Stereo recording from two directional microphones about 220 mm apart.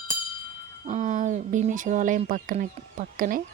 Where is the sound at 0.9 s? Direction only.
35° right (ahead or behind).